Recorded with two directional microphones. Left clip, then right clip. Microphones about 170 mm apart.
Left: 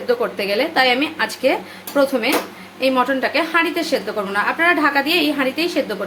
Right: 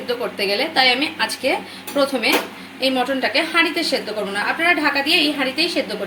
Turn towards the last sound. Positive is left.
turn(degrees=20)  # may be behind; listen again after turning